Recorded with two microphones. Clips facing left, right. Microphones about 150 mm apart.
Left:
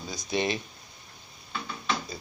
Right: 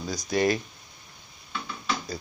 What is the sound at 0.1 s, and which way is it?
Speech, 25° left (ahead or behind).